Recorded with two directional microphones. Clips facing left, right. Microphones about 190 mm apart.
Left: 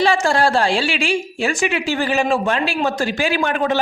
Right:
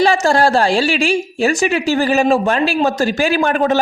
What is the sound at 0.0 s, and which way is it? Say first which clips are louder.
A woman's voice: right 3 dB; 40° right (ahead or behind).